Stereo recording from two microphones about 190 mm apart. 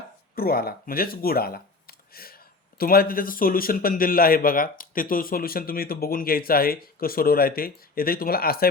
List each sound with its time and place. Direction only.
0.3 s speech: 50° left (ahead or behind)